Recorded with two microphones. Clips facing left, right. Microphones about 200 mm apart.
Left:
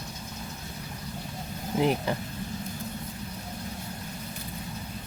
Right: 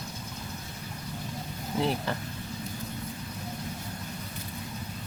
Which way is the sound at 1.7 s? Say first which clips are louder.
Left 3 dB; 15° left (ahead or behind).